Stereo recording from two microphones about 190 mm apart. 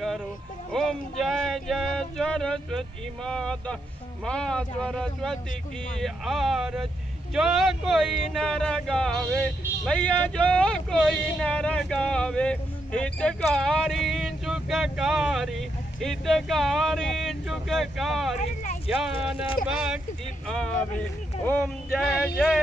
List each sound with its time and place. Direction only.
0.7 s speech: 5° left (ahead or behind)
18.4 s speech: 40° left (ahead or behind)
18.9 s speech: 5° right (ahead or behind)
22.1 s speech: centre (ahead or behind)